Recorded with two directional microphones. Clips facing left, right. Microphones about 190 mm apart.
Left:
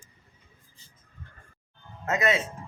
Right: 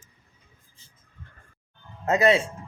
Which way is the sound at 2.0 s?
30° right (ahead or behind).